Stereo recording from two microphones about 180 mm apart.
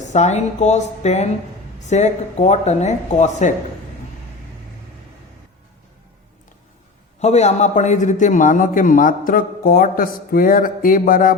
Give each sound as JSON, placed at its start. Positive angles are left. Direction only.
{"t": 0.0, "sound": "speech", "side_deg": 40}
{"t": 7.2, "sound": "a man's voice", "side_deg": 40}